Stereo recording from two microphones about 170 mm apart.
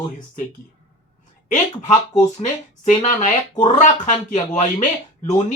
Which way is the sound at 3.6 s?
45° left (ahead or behind).